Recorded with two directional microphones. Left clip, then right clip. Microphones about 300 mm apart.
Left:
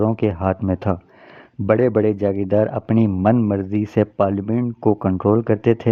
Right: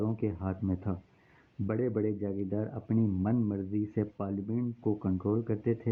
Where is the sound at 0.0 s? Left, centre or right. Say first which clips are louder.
Left 15 dB; left.